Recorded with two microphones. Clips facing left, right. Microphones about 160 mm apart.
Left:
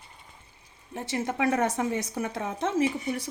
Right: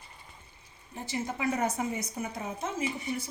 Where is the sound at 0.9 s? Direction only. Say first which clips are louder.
Left 5 dB; 85° left.